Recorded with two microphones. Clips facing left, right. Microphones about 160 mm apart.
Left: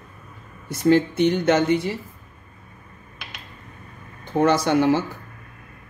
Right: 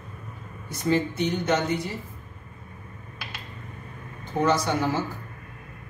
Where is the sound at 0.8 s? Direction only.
65° left (ahead or behind).